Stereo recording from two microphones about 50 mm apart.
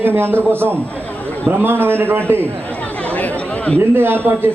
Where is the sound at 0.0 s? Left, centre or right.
Right.